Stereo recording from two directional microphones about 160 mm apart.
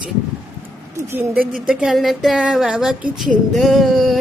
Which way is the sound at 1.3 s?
65° right (ahead or behind).